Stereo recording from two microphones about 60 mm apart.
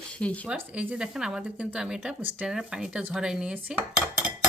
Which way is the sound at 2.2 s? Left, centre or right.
Right.